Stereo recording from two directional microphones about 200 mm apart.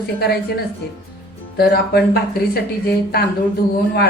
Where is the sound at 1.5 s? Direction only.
50° left (ahead or behind).